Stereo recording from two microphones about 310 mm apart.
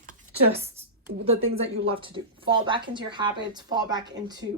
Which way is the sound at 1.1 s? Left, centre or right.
Right.